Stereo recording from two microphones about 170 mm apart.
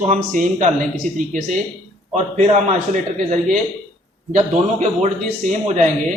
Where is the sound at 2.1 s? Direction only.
40° right (ahead or behind).